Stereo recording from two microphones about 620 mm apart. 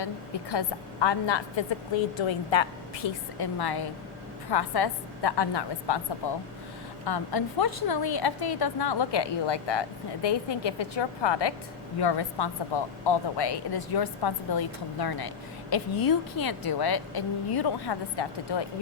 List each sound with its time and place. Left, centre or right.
0.5 s a woman's voice: left
7.0 s a woman's voice: left